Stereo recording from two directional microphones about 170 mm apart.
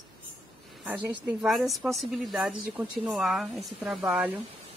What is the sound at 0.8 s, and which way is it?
A woman's voice, 10° right (ahead or behind).